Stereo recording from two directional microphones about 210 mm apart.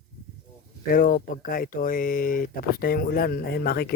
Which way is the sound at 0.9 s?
40° left (ahead or behind).